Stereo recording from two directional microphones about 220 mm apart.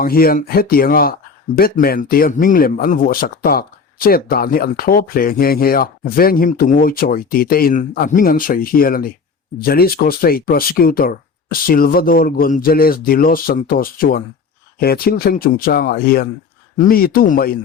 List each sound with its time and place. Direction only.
0.0 s speech: 40° left (ahead or behind)